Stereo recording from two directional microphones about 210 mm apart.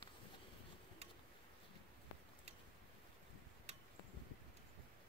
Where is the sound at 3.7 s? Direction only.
30° right (ahead or behind).